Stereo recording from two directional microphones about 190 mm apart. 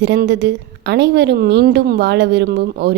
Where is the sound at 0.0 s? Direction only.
65° right (ahead or behind).